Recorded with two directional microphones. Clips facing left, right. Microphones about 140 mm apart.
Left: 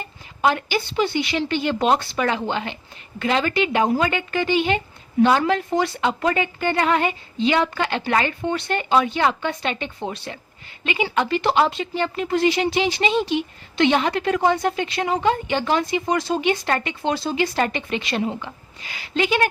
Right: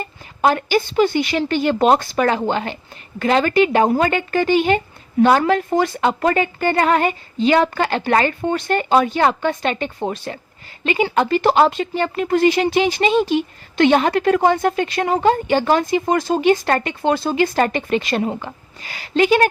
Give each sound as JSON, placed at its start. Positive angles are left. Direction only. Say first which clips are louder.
{"t": 0.4, "sound": "speech", "louder": "right 4 dB", "side_deg": -45}